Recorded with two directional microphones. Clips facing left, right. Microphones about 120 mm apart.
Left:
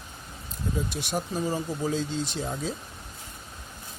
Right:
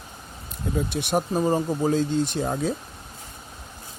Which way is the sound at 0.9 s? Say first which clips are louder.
Right 6 dB; 60° right (ahead or behind).